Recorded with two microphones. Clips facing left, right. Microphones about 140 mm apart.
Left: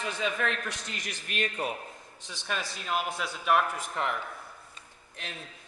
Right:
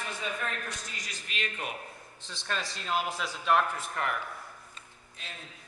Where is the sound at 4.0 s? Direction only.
20° left (ahead or behind).